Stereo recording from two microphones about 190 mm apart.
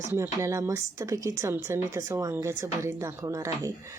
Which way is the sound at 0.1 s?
15° right (ahead or behind).